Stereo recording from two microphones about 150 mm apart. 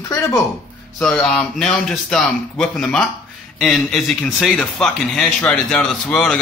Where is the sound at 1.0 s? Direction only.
5° left (ahead or behind).